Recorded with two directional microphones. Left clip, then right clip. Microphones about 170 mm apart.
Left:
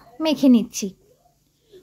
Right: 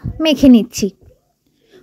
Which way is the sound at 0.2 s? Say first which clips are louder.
Right 7 dB; 45° right (ahead or behind).